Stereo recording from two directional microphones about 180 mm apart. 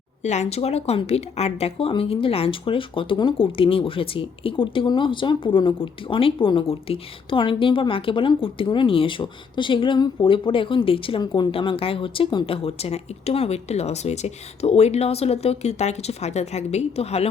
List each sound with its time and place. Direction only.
0.2 s a woman's voice: 40° left (ahead or behind)